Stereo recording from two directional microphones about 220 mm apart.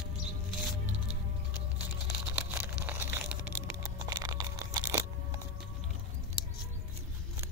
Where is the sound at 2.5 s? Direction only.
10° right (ahead or behind).